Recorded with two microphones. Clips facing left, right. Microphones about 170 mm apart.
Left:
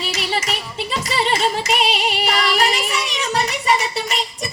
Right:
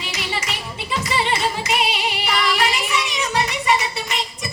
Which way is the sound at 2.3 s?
40° left (ahead or behind).